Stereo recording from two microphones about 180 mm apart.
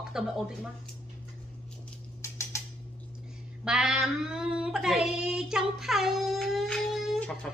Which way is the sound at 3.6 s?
5° right (ahead or behind).